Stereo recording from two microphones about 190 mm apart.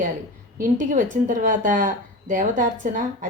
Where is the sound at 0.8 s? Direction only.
40° right (ahead or behind).